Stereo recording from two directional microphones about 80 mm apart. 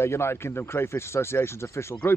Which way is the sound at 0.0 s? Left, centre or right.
Left.